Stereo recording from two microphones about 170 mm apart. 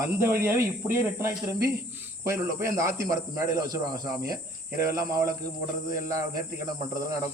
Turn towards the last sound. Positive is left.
turn(degrees=-20)  # may be behind; listen again after turning